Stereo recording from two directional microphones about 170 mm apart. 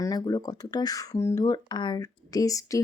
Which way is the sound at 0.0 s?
20° left (ahead or behind).